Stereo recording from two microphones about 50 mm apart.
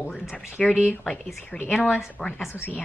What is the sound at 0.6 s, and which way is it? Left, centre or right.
Speech, centre.